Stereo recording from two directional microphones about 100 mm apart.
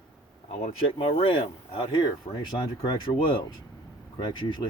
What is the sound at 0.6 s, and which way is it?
Speech, 70° left (ahead or behind).